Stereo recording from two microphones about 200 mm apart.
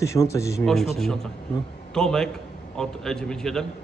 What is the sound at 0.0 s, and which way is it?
Speech, 15° left (ahead or behind).